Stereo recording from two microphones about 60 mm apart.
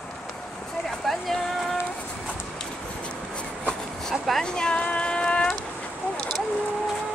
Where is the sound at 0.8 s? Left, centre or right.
Centre.